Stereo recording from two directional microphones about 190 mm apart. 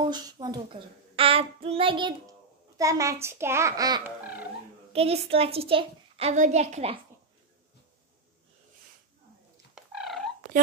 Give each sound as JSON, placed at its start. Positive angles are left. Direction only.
{"t": 0.1, "sound": "a child's voice", "side_deg": -20}
{"t": 4.9, "sound": "a child's voice", "side_deg": -30}
{"t": 9.8, "sound": "dog", "side_deg": 0}